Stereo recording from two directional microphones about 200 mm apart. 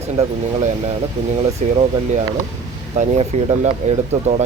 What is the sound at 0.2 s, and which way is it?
Speech, 30° right (ahead or behind).